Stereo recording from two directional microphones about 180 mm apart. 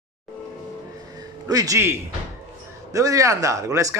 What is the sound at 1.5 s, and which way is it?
Speech, 20° right (ahead or behind).